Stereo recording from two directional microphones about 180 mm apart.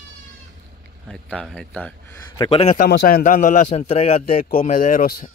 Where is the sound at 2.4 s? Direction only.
30° left (ahead or behind).